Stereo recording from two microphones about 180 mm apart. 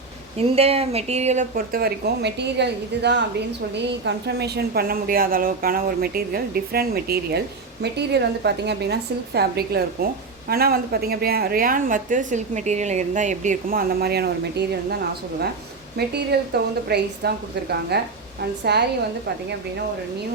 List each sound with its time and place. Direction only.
0.3 s a woman's voice: 35° right (ahead or behind); by 14.9 s 60° right (ahead or behind)
16.0 s a woman's voice: 65° right (ahead or behind)